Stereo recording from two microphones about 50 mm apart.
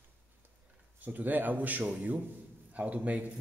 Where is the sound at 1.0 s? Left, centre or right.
Right.